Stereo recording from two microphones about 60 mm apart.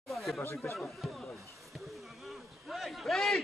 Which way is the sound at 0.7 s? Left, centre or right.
Centre.